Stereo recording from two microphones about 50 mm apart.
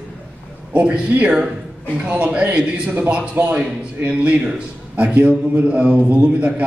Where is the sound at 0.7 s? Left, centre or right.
Right.